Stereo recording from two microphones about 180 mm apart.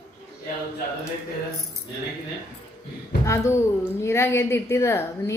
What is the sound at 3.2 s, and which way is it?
A woman's voice, 15° left (ahead or behind).